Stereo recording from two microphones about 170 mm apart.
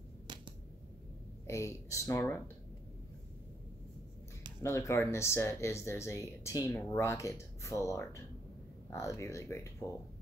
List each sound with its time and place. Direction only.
1.5 s speech: 15° left (ahead or behind)
4.6 s speech: 15° left (ahead or behind)